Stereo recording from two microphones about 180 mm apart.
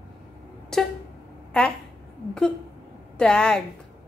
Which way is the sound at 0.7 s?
5° left (ahead or behind).